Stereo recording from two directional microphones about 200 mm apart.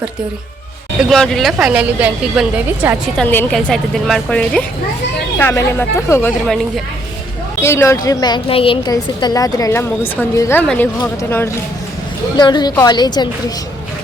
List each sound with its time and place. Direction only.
1.1 s a woman's voice: 5° left (ahead or behind)
3.2 s a woman's voice: 5° left (ahead or behind)
7.6 s a woman's voice: 15° left (ahead or behind)